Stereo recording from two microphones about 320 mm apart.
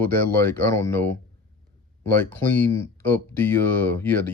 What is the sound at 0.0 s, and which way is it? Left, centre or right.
Speech, centre.